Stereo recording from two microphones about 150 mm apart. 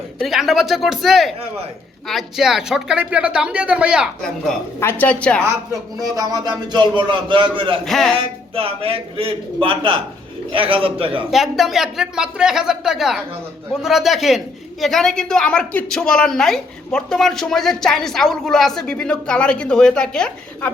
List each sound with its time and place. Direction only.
0.2 s a woman's voice: centre (ahead or behind)
4.8 s a woman's voice: 15° left (ahead or behind)
6.0 s a man's voice: 25° right (ahead or behind)
7.9 s a woman's voice: centre (ahead or behind)
8.1 s a man's voice: 35° right (ahead or behind)
11.3 s a woman's voice: centre (ahead or behind)